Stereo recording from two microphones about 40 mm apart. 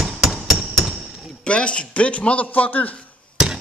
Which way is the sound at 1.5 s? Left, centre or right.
Left.